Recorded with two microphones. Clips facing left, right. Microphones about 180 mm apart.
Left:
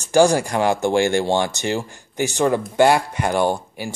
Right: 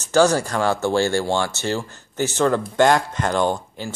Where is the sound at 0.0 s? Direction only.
15° left (ahead or behind).